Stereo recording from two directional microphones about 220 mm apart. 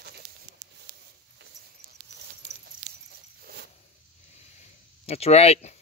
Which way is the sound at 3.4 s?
45° right (ahead or behind).